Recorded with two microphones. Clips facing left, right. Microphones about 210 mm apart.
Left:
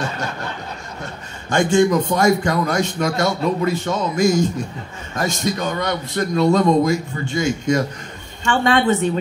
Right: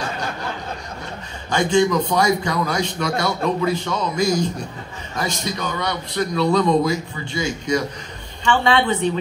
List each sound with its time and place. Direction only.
1.5 s a man's voice: 45° left (ahead or behind)